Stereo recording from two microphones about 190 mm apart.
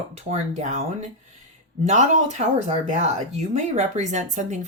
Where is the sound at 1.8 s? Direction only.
40° right (ahead or behind).